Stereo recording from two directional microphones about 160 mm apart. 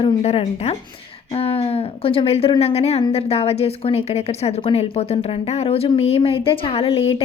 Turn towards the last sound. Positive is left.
turn(degrees=35)  # may be behind; listen again after turning